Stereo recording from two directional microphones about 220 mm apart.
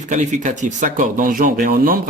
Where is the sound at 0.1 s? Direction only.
35° right (ahead or behind).